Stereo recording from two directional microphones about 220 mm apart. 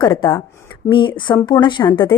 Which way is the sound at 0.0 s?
20° left (ahead or behind).